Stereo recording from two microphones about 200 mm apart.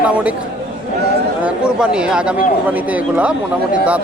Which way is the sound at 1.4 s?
5° right (ahead or behind).